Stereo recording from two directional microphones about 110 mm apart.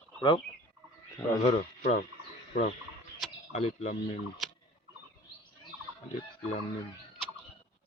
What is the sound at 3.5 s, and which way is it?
Speech, 90° left.